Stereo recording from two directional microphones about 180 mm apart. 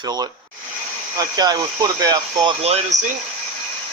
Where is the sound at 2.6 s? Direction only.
35° right (ahead or behind).